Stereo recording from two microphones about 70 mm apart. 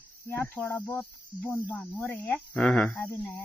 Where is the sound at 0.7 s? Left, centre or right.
Left.